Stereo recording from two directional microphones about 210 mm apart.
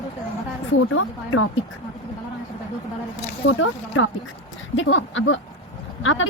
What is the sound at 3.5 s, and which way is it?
A woman's voice, 70° left (ahead or behind).